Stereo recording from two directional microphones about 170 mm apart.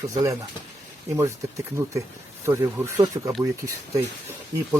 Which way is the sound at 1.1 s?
15° right (ahead or behind).